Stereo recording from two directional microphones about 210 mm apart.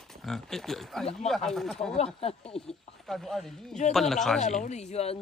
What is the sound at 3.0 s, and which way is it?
Speech, centre (ahead or behind).